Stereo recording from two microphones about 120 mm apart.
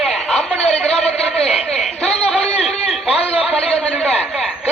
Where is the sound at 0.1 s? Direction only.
60° left (ahead or behind).